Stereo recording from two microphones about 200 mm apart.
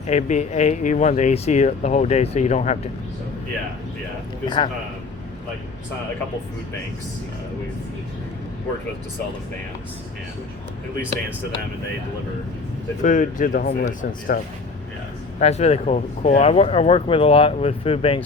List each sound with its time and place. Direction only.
0.1 s speech: 35° left (ahead or behind)
4.4 s a man's voice: 20° left (ahead or behind)
13.0 s speech: 40° left (ahead or behind)
15.4 s speech: 35° left (ahead or behind)